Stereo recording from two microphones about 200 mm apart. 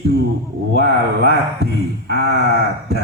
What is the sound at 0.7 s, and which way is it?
Speech, 55° right (ahead or behind).